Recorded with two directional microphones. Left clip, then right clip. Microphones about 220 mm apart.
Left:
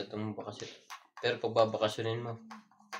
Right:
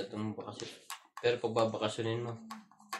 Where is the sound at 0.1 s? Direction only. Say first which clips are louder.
Left 1 dB; 50° left (ahead or behind).